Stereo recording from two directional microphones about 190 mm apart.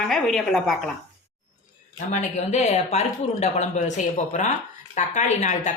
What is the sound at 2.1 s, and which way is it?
Speech, 40° left (ahead or behind).